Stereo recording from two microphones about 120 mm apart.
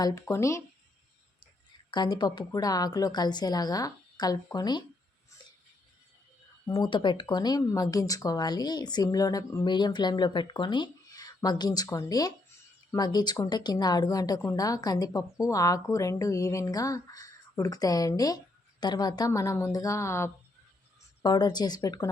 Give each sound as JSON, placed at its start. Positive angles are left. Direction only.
{"t": 0.0, "sound": "speech", "side_deg": 25}
{"t": 1.9, "sound": "a woman's voice", "side_deg": 40}
{"t": 6.7, "sound": "a woman's voice", "side_deg": 40}
{"t": 21.2, "sound": "a woman's voice", "side_deg": 35}